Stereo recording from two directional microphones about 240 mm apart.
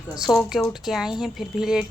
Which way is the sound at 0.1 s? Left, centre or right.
Centre.